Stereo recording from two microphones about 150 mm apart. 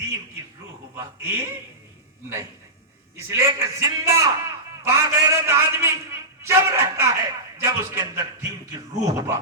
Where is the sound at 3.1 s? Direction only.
20° right (ahead or behind).